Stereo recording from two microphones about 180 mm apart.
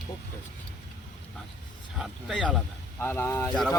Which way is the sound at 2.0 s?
Centre (ahead or behind).